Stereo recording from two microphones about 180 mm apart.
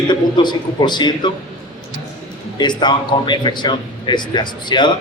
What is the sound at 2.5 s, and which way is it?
A man's voice, 25° left (ahead or behind).